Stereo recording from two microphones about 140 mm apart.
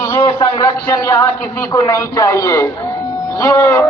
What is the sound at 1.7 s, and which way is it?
Speech, 25° left (ahead or behind).